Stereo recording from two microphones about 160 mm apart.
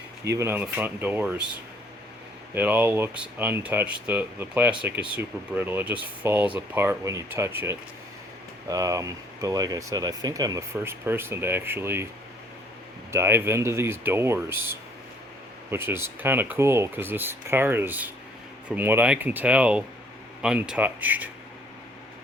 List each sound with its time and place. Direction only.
0.3 s speech: 15° right (ahead or behind)
2.6 s speech: 10° right (ahead or behind)
13.1 s speech: 15° right (ahead or behind)